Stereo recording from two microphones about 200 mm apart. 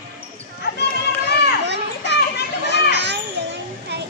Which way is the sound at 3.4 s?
55° right (ahead or behind).